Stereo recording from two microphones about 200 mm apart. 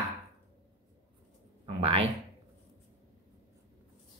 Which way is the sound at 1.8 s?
30° right (ahead or behind).